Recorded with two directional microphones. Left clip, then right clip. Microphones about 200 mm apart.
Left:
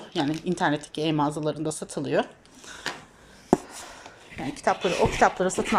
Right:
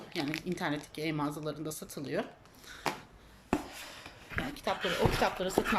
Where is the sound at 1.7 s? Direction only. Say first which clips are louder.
Left 10 dB; 15° right (ahead or behind).